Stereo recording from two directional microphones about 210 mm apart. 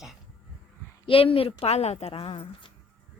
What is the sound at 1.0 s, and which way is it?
A woman's voice, 25° left (ahead or behind).